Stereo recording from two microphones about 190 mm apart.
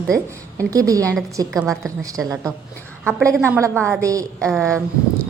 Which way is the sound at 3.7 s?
5° left (ahead or behind).